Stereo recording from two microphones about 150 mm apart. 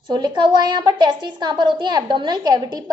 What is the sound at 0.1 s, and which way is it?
A woman's voice, 30° right (ahead or behind).